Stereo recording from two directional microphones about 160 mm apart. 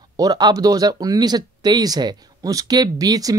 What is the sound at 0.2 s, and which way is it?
A man's voice, 25° right (ahead or behind).